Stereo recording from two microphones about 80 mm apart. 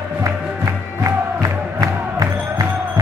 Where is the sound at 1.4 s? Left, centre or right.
Right.